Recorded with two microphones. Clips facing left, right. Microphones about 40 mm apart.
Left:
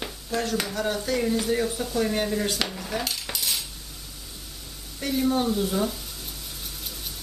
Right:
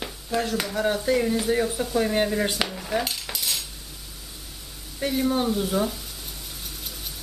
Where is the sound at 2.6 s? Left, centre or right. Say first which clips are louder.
Right 3 dB; centre.